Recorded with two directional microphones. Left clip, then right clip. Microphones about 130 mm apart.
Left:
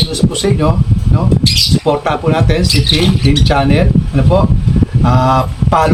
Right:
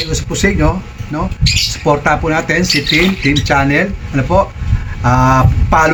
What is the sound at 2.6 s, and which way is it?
Speech, 75° left (ahead or behind).